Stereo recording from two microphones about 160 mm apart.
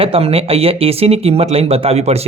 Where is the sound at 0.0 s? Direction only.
35° right (ahead or behind).